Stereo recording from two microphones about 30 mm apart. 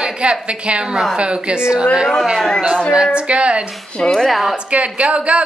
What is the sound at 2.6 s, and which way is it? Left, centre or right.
Speech, right.